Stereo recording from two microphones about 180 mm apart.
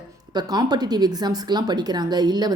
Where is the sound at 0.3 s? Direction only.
20° right (ahead or behind).